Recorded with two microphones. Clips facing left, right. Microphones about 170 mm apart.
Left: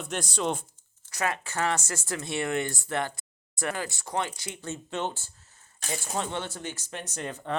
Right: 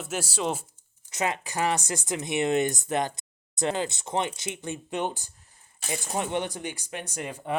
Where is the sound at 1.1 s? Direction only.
20° right (ahead or behind).